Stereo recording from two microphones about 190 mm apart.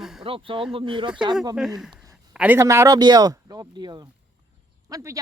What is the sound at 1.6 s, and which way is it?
A man's voice, centre (ahead or behind).